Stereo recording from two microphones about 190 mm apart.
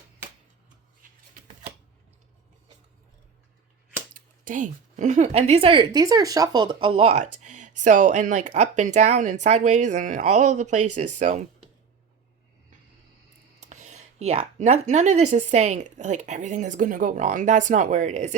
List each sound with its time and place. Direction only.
4.1 s speech: 45° right (ahead or behind)
13.6 s speech: 40° right (ahead or behind)